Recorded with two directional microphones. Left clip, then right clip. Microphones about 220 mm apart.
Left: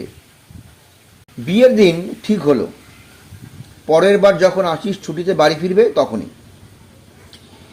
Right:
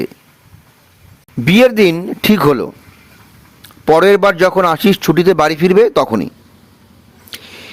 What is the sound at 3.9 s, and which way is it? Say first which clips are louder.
A man's voice: right 2 dB; 45° right (ahead or behind).